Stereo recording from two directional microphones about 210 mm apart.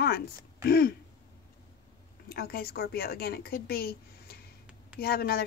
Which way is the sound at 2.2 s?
45° left (ahead or behind).